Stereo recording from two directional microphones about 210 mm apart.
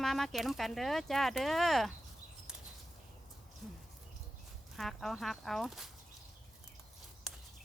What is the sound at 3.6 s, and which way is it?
Speech, centre (ahead or behind).